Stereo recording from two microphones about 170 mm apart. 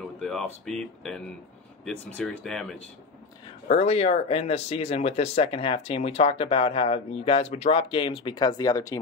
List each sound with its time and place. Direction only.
0.2 s speech: centre (ahead or behind)
3.6 s speech: 35° left (ahead or behind); by 8.9 s 20° left (ahead or behind)